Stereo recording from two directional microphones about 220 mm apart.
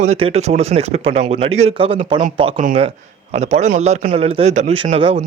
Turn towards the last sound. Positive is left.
turn(degrees=-25)  # may be behind; listen again after turning